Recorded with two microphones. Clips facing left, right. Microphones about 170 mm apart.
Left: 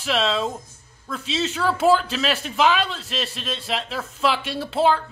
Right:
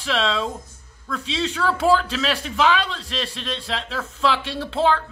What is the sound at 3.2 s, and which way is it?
A man's voice, 15° left (ahead or behind).